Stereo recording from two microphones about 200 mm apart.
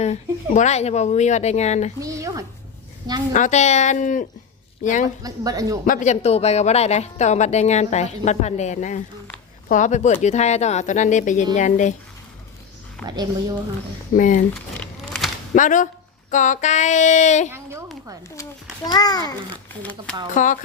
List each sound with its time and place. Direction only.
0.0 s a woman's voice: 35° left (ahead or behind)
2.0 s speech: 15° right (ahead or behind)
3.3 s a woman's voice: 35° left (ahead or behind)
5.2 s speech: 15° right (ahead or behind)
5.8 s a woman's voice: 40° left (ahead or behind)
13.0 s a woman's voice: 5° left (ahead or behind)
14.2 s a woman's voice: 40° left (ahead or behind)
14.8 s a sound: centre (ahead or behind)
15.5 s a woman's voice: 40° left (ahead or behind)
17.5 s speech: 15° right (ahead or behind)
18.9 s a child's voice: 20° left (ahead or behind)
19.8 s speech: 10° left (ahead or behind)
20.3 s a woman's voice: 40° left (ahead or behind)